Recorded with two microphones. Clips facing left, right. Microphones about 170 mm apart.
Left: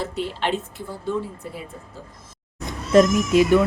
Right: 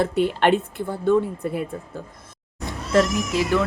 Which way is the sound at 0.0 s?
55° right (ahead or behind).